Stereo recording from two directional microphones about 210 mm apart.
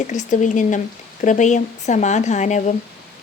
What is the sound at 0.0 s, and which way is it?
A woman's voice, 35° left (ahead or behind).